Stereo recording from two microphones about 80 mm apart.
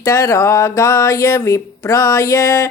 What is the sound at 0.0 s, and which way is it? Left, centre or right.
Speech, left.